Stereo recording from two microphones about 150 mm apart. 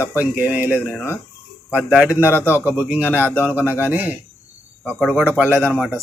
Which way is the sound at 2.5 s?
15° left (ahead or behind).